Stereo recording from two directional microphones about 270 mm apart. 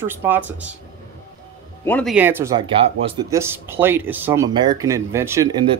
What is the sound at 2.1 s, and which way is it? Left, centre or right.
Speech, centre.